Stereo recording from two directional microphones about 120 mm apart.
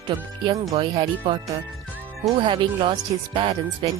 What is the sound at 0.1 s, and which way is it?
Speech, 45° right (ahead or behind).